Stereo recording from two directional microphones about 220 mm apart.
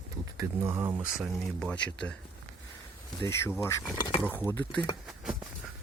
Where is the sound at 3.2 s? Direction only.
10° left (ahead or behind).